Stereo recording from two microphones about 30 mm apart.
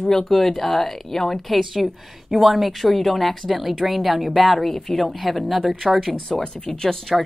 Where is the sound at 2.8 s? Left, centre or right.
Centre.